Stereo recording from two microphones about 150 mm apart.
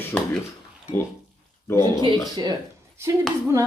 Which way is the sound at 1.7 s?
30° right (ahead or behind).